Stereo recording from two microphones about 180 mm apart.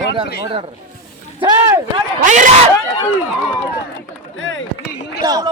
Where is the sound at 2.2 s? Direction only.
45° right (ahead or behind).